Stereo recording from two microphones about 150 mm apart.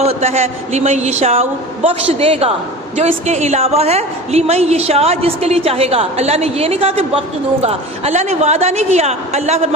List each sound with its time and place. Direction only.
0.0 s a woman's voice: 45° right (ahead or behind)